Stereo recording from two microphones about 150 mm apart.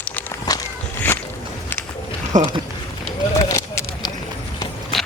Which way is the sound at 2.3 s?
55° right (ahead or behind).